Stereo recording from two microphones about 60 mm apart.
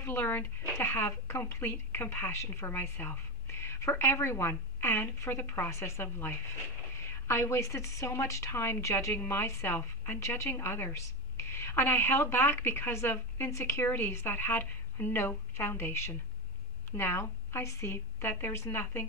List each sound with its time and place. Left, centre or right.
0.0 s a woman's voice: left
9.1 s a woman's voice: left